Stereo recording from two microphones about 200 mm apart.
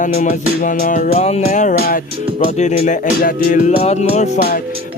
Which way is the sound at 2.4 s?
35° left (ahead or behind).